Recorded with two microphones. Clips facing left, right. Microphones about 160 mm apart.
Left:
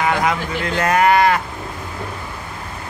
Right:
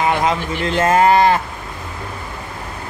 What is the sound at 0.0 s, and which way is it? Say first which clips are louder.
Speech: right 1 dB; 25° right (ahead or behind).